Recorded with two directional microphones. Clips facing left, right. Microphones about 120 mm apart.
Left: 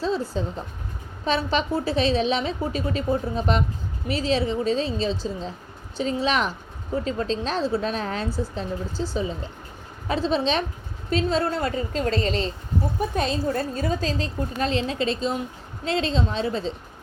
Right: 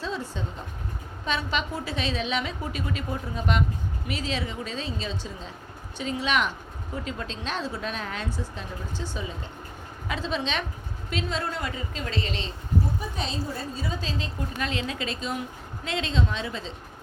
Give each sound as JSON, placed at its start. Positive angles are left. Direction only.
{"t": 0.0, "sound": "a sound", "side_deg": 30}
{"t": 1.2, "sound": "a woman's voice", "side_deg": 35}
{"t": 13.0, "sound": "a woman's voice", "side_deg": 55}